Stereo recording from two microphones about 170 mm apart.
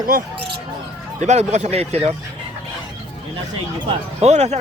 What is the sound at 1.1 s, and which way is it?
Speech, 40° right (ahead or behind).